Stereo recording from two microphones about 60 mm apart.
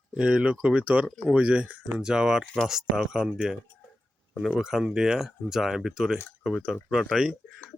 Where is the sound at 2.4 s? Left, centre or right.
Centre.